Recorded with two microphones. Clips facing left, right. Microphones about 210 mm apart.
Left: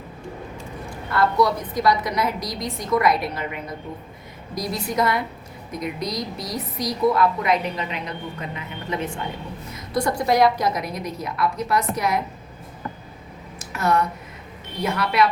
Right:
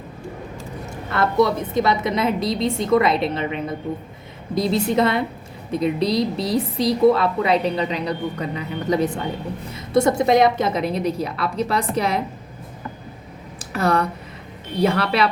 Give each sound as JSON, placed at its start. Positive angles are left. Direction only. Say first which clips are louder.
{"t": 1.1, "sound": "a woman's voice", "louder": "right 2 dB", "side_deg": -25}
{"t": 9.7, "sound": "a woman's voice", "louder": "right 6 dB", "side_deg": -25}
{"t": 13.6, "sound": "a sound", "louder": "right 2 dB", "side_deg": -30}
{"t": 14.8, "sound": "a woman's voice", "louder": "right 5 dB", "side_deg": -30}